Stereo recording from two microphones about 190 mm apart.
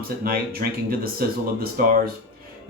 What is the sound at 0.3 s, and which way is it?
Speech, 55° right (ahead or behind).